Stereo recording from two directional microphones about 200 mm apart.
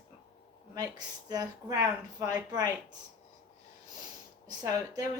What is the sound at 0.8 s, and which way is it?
Speech, 20° right (ahead or behind).